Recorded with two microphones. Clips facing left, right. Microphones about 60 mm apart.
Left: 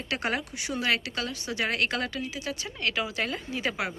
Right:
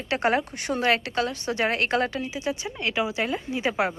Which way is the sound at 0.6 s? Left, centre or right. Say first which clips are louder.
Right 5 dB; right.